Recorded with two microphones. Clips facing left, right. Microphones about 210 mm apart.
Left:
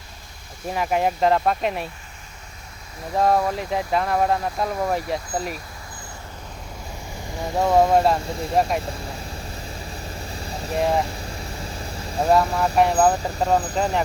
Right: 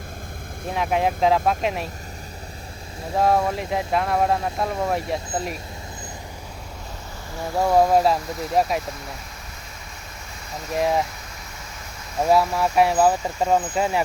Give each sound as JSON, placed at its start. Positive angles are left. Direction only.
{"t": 0.7, "sound": "speech", "side_deg": 0}
{"t": 3.2, "sound": "speech", "side_deg": 0}
{"t": 7.7, "sound": "speech", "side_deg": 0}
{"t": 10.5, "sound": "vehicle", "side_deg": 30}
{"t": 10.8, "sound": "speech", "side_deg": 0}
{"t": 11.5, "sound": "vehicle", "side_deg": 30}
{"t": 12.3, "sound": "speech", "side_deg": -5}